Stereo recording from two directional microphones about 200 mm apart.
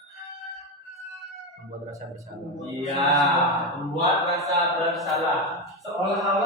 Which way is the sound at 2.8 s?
Centre (ahead or behind).